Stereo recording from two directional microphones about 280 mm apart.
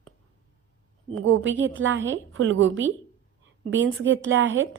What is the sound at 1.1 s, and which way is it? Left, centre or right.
A woman's voice, right.